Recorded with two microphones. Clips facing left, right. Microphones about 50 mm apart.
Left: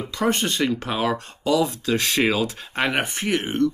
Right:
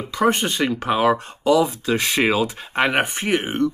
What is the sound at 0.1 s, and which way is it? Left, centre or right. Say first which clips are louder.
Speech: right 4 dB; centre.